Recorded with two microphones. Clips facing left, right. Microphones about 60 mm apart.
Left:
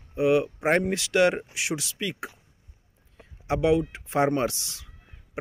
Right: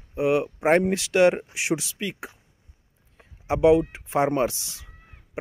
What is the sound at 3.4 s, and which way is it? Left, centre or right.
Speech, centre.